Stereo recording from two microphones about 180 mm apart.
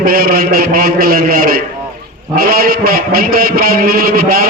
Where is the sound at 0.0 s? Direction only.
55° right (ahead or behind).